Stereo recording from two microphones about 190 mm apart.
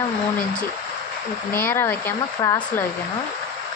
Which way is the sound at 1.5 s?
10° left (ahead or behind).